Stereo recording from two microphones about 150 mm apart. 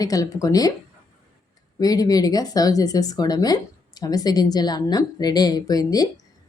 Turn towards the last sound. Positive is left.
turn(degrees=25)  # may be behind; listen again after turning